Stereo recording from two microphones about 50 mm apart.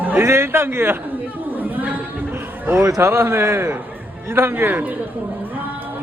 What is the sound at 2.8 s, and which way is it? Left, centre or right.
Speech, right.